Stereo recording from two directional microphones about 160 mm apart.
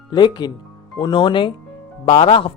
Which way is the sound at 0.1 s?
25° left (ahead or behind).